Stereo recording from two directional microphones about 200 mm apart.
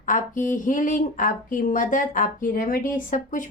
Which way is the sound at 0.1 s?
40° left (ahead or behind).